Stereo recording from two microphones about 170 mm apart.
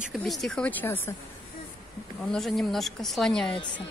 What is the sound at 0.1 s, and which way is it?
A woman's voice, centre (ahead or behind).